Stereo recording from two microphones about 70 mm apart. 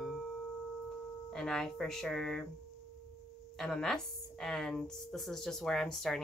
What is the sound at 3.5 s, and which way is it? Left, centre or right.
A woman's voice, centre.